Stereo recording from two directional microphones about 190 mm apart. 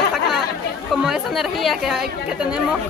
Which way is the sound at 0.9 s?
Centre (ahead or behind).